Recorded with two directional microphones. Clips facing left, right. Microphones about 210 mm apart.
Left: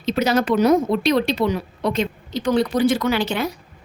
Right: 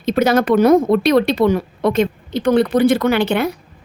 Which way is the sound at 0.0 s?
55° right (ahead or behind).